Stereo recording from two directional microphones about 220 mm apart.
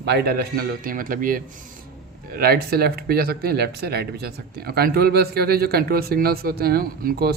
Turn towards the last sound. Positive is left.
turn(degrees=-45)  # may be behind; listen again after turning